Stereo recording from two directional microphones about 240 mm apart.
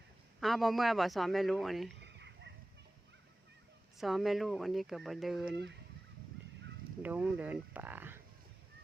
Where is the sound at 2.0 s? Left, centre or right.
Right.